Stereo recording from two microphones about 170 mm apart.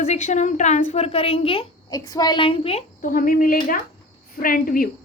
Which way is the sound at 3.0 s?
55° left (ahead or behind).